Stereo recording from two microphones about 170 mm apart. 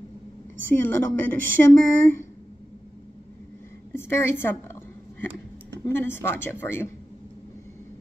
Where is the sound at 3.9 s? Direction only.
15° left (ahead or behind).